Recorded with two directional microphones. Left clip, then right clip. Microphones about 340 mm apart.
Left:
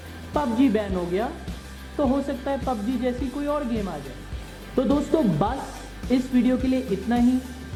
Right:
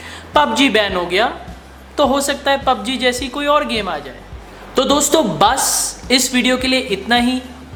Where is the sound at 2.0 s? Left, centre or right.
Centre.